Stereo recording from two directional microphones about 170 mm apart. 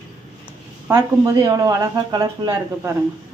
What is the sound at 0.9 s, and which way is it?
Frying, 15° right (ahead or behind).